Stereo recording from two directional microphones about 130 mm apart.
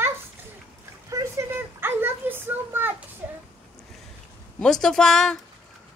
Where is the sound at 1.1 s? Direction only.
20° right (ahead or behind).